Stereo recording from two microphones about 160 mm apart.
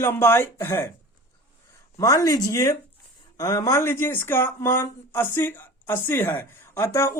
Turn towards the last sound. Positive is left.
turn(degrees=15)  # may be behind; listen again after turning